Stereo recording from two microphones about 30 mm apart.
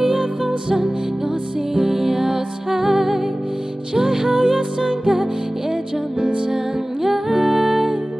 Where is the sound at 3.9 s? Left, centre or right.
Centre.